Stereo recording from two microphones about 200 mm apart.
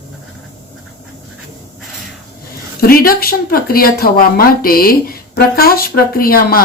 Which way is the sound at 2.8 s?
50° left (ahead or behind).